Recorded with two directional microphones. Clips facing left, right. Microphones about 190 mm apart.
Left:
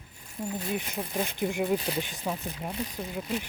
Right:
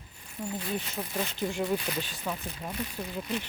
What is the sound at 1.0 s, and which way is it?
Speech, 15° left (ahead or behind).